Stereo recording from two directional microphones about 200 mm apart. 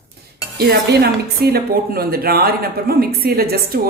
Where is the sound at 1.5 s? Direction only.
50° right (ahead or behind).